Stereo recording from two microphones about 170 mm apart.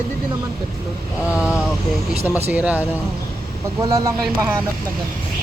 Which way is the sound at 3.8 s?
20° right (ahead or behind).